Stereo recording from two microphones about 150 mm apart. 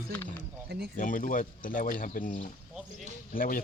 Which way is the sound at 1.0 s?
65° left (ahead or behind).